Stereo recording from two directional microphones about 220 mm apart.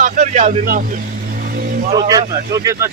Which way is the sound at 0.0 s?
30° right (ahead or behind).